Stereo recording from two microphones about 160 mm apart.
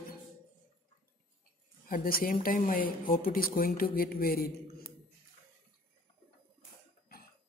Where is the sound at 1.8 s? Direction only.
65° left (ahead or behind).